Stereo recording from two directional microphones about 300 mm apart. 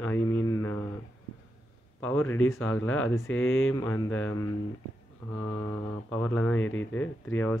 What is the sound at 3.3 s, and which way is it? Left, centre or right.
Speech, left.